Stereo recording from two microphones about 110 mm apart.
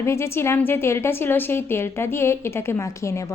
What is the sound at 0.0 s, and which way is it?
A woman's voice, 25° left (ahead or behind).